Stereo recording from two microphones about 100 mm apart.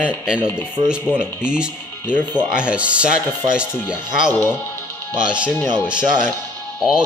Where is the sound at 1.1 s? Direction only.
25° left (ahead or behind).